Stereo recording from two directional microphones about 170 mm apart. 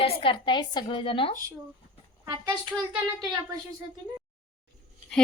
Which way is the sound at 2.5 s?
5° right (ahead or behind).